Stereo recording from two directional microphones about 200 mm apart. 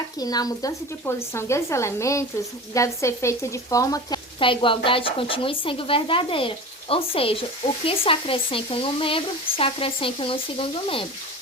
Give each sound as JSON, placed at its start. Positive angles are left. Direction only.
{"t": 0.2, "sound": "speech", "side_deg": 20}